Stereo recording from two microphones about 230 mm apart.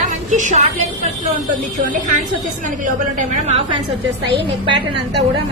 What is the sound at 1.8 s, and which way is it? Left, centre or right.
Speech, right.